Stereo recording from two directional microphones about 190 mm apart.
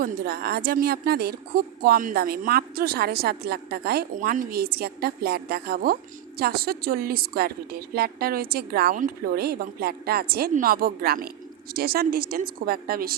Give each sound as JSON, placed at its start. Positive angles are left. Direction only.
{"t": 0.0, "sound": "speech", "side_deg": -55}